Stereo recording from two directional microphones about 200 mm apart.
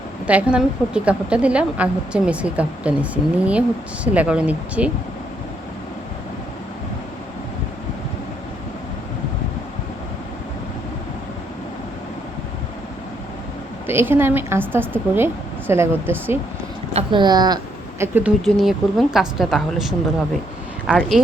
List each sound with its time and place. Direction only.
0.3 s a woman's voice: 5° right (ahead or behind)
13.8 s a woman's voice: 10° right (ahead or behind)
16.9 s speech: 25° right (ahead or behind)
18.0 s a woman's voice: 10° right (ahead or behind)